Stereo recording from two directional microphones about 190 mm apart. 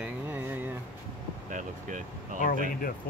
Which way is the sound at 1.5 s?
40° right (ahead or behind).